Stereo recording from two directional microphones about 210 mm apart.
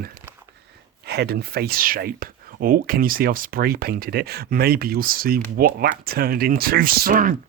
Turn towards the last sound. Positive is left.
turn(degrees=-40)  # may be behind; listen again after turning